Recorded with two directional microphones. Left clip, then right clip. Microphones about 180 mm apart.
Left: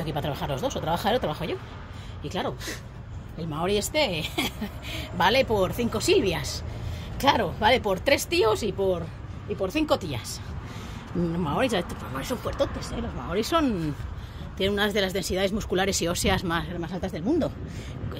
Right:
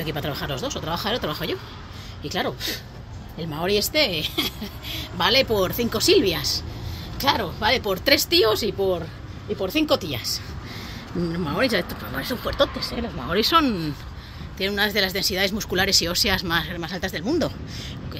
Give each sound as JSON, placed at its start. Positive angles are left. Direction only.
{"t": 0.0, "sound": "speech", "side_deg": 15}
{"t": 1.2, "sound": "a woman's voice", "side_deg": 5}
{"t": 7.2, "sound": "a woman's voice", "side_deg": 15}
{"t": 11.2, "sound": "a woman's voice", "side_deg": 10}
{"t": 14.6, "sound": "speech", "side_deg": 15}
{"t": 16.6, "sound": "a woman's voice", "side_deg": -5}